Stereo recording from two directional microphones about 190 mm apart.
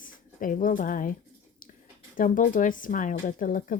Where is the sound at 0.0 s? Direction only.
45° left (ahead or behind).